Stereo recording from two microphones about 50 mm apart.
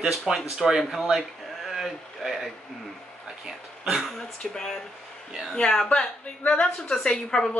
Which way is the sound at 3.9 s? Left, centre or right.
Centre.